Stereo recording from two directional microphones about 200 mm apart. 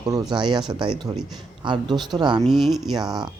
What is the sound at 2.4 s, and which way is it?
Speech, centre (ahead or behind).